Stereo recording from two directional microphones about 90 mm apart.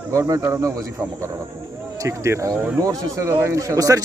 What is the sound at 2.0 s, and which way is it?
Speech, 35° right (ahead or behind).